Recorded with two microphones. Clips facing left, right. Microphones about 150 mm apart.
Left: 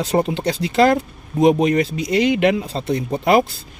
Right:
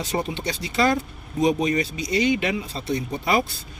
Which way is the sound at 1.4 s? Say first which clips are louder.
Left 6 dB; 75° left (ahead or behind).